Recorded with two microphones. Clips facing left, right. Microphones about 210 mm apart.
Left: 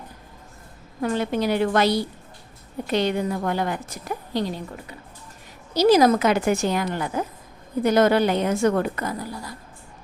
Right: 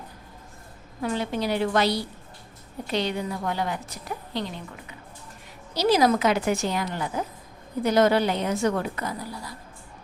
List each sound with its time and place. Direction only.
1.0 s a woman's voice: 55° left (ahead or behind)
4.4 s a woman's voice: 40° left (ahead or behind)